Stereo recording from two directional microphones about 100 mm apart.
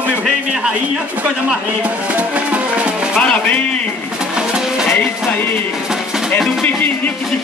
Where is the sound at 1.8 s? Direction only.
15° right (ahead or behind).